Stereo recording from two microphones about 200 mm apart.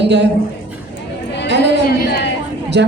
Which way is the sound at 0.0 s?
60° right (ahead or behind).